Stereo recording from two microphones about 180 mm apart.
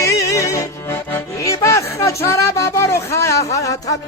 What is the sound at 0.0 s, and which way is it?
Music, 15° left (ahead or behind).